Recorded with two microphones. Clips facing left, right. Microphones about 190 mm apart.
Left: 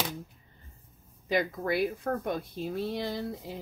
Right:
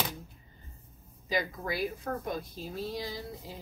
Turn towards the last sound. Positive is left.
turn(degrees=60)  # may be behind; listen again after turning